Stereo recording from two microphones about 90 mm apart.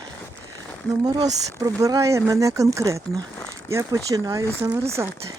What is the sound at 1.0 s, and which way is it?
Speech, 45° right (ahead or behind).